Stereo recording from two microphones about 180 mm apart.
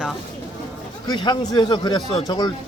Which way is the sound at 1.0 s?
25° left (ahead or behind).